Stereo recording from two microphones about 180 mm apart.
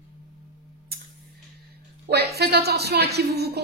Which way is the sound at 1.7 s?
65° right (ahead or behind).